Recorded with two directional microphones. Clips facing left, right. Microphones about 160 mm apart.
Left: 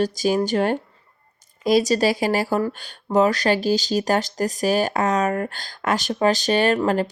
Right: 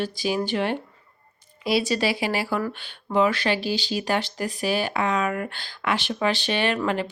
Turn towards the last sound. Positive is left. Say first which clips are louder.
# left 5 dB
turn(degrees=40)  # may be behind; listen again after turning